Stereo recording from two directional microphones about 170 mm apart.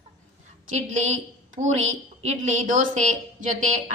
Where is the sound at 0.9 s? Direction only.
40° right (ahead or behind).